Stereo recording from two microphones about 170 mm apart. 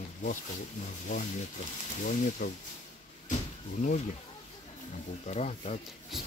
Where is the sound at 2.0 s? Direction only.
50° left (ahead or behind).